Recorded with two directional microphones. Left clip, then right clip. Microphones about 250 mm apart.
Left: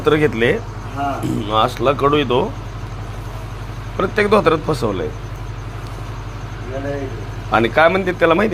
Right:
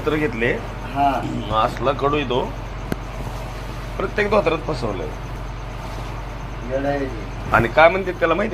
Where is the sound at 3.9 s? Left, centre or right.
Left.